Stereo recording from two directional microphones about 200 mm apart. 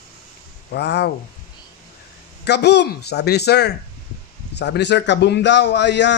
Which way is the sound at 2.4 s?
55° left (ahead or behind).